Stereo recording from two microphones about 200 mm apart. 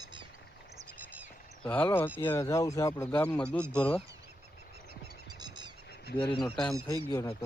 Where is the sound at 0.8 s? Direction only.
10° right (ahead or behind).